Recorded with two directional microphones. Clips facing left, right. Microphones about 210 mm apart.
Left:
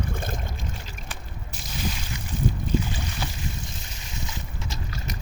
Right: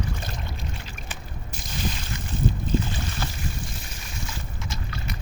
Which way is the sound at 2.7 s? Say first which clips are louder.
Right 1 dB; 10° left (ahead or behind).